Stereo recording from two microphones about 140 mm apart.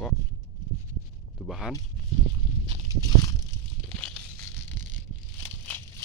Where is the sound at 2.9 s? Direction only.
25° left (ahead or behind).